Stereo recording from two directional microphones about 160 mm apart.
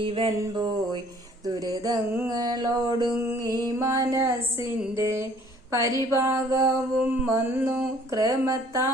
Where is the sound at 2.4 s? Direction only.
25° right (ahead or behind).